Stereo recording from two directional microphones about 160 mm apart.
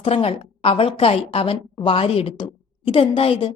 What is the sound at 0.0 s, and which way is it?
A woman's voice, 35° left (ahead or behind).